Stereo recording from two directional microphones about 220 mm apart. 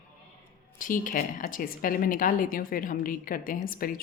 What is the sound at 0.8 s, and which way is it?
Speech, 35° left (ahead or behind).